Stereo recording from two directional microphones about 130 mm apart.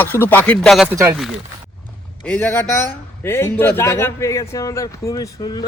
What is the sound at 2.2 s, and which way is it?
A man's voice, 10° left (ahead or behind).